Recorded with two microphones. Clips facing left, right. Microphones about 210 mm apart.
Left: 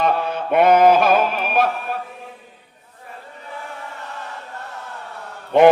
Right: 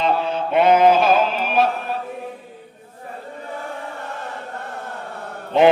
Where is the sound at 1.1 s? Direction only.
55° left (ahead or behind).